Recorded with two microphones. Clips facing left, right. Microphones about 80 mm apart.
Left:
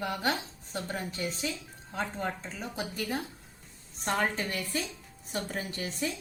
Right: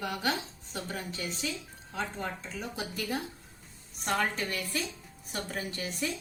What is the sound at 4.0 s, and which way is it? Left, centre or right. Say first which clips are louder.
A woman's voice: left 1 dB; left.